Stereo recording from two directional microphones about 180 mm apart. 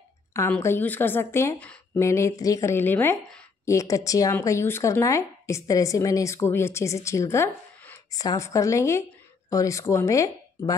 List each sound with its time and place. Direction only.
0.3 s speech: 15° left (ahead or behind)